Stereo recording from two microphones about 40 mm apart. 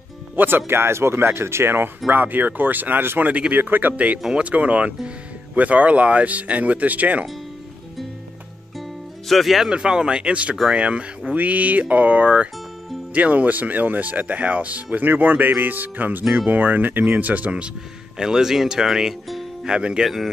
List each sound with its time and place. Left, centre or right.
0.4 s speech: right
2.0 s speech: right
3.2 s speech: right
3.5 s speech: right
9.3 s speech: centre
9.7 s speech: right
18.1 s speech: centre